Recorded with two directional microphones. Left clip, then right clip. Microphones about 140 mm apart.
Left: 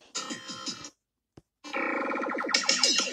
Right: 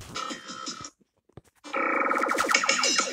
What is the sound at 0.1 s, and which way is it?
Music, 35° left (ahead or behind).